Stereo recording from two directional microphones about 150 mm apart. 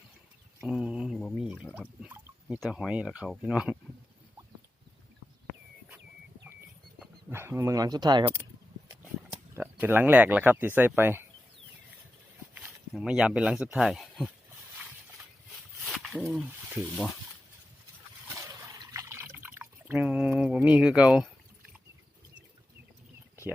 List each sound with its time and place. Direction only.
0.6 s mantra: 5° right (ahead or behind)
2.0 s speech: 10° right (ahead or behind)
7.3 s speech: 15° right (ahead or behind)
9.6 s speech: 15° right (ahead or behind)
12.5 s speech: 5° right (ahead or behind)
15.8 s a sound: centre (ahead or behind)
18.3 s liquid: 20° right (ahead or behind)
20.1 s a sound: 5° right (ahead or behind)